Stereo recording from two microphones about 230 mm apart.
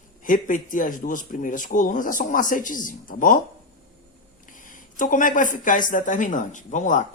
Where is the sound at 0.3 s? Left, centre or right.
Left.